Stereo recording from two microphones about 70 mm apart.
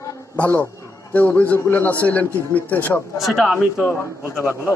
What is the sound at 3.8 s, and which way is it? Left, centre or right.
Speech, left.